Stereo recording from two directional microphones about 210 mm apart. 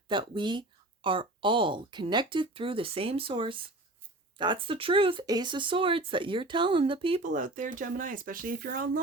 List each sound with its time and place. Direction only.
0.1 s speech: 20° right (ahead or behind)
7.2 s speech: 35° right (ahead or behind)